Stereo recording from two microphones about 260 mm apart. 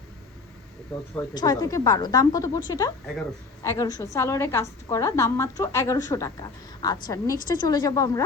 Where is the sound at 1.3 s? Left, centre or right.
Centre.